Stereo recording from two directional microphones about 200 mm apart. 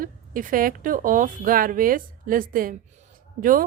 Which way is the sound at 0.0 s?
45° right (ahead or behind).